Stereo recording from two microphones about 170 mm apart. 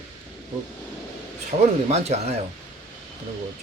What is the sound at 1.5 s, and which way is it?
Speech, 35° right (ahead or behind).